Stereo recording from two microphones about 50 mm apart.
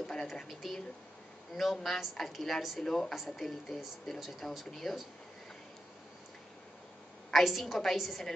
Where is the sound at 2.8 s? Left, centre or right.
Centre.